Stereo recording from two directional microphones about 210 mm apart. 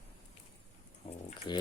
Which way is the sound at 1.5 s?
20° left (ahead or behind).